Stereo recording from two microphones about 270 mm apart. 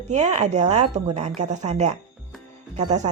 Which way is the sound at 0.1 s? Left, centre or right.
Right.